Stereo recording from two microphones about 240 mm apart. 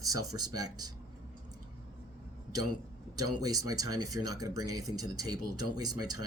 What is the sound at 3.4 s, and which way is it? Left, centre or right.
Speech, centre.